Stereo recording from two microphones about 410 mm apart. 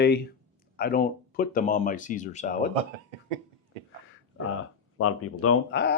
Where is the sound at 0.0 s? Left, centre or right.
Left.